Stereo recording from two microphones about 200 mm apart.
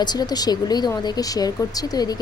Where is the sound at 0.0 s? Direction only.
20° left (ahead or behind).